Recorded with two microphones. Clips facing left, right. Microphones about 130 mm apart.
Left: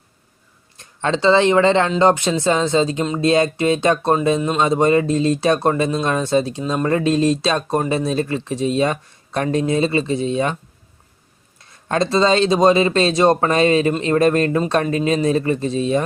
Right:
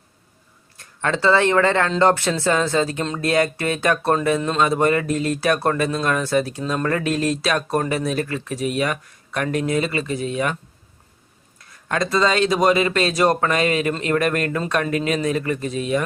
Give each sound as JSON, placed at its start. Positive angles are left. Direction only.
{"t": 0.8, "sound": "speech", "side_deg": 20}
{"t": 11.7, "sound": "speech", "side_deg": 30}